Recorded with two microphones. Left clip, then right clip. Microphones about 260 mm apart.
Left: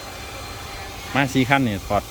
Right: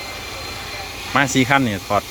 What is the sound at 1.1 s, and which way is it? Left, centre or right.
Speech, centre.